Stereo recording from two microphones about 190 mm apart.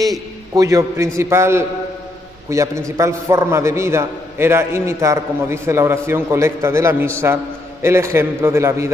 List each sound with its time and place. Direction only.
0.0 s a man's voice: 20° right (ahead or behind)